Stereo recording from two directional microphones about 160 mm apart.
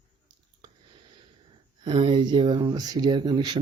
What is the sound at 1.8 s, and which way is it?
Speech, 30° right (ahead or behind).